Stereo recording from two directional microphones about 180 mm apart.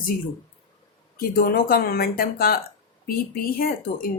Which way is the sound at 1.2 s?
55° left (ahead or behind).